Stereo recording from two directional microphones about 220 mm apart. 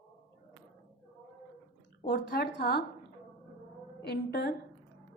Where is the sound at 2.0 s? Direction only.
45° left (ahead or behind).